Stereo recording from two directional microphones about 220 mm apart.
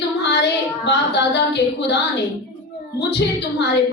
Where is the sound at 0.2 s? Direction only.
50° left (ahead or behind).